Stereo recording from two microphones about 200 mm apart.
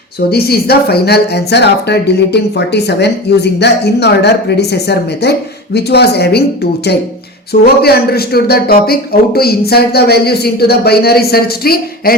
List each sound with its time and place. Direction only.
0.3 s a man's voice: 50° left (ahead or behind)